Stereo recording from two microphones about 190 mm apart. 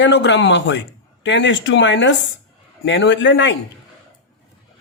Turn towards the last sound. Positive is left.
turn(degrees=70)  # may be behind; listen again after turning